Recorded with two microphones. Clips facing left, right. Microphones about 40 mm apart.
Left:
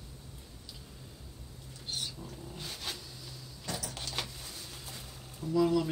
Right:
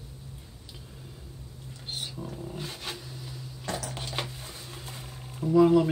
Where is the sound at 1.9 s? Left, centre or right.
Right.